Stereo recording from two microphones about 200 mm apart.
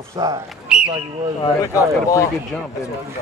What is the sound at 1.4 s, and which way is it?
Speech, 15° left (ahead or behind).